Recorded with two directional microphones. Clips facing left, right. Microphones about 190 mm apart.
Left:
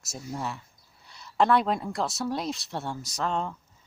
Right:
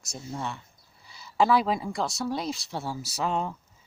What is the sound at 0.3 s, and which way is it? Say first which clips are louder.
Speech: even; centre (ahead or behind).